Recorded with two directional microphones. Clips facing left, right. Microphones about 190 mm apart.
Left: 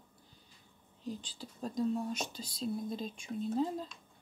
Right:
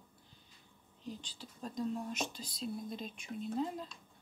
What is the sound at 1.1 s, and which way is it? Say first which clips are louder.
Cutlery: left 4 dB; 35° left (ahead or behind).